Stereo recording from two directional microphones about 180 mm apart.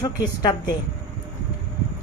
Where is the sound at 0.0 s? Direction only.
20° left (ahead or behind).